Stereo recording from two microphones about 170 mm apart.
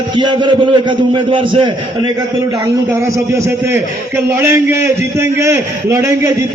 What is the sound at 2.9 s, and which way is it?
A man's voice, 15° right (ahead or behind).